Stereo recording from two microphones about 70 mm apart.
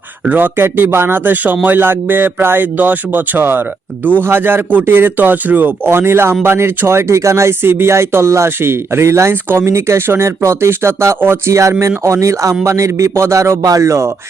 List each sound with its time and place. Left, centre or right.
0.3 s speech: right
9.3 s speech: right
9.6 s a man's voice: right